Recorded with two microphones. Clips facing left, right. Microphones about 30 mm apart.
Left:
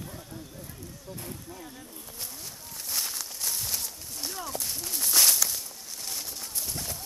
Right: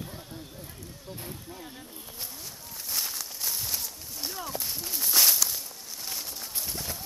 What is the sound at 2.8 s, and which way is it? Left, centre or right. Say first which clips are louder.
Walk: even; centre.